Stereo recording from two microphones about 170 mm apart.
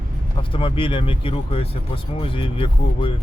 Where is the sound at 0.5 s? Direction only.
30° left (ahead or behind).